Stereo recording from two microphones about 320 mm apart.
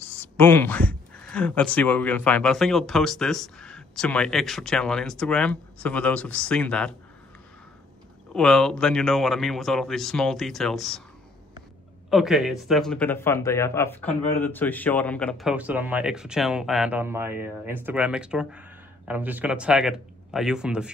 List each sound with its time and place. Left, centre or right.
0.2 s speech: centre
8.3 s speech: centre
12.1 s speech: centre